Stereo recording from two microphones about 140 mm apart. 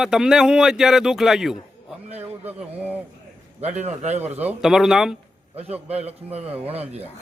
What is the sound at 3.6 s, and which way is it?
Speech, 55° right (ahead or behind).